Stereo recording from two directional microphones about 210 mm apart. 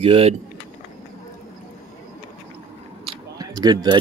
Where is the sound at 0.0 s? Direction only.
30° right (ahead or behind).